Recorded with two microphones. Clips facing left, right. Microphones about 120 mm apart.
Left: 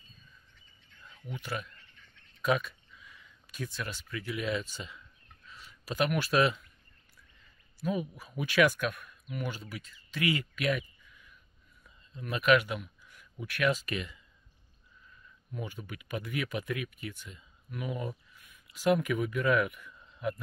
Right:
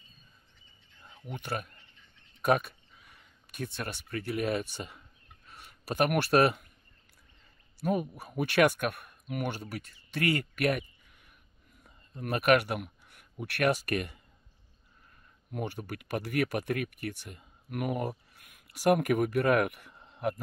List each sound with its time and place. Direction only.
1.3 s speech: 55° right (ahead or behind)
7.8 s speech: 55° right (ahead or behind)